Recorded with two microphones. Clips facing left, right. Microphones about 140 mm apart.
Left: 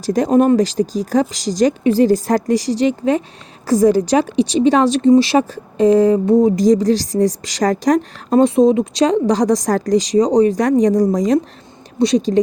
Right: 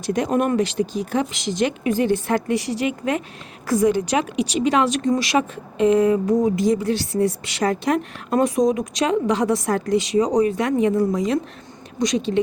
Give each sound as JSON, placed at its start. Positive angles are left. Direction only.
{"t": 0.0, "sound": "speech", "side_deg": 35}